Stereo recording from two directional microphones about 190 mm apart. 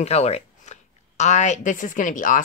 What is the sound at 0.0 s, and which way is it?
Speech, 35° left (ahead or behind).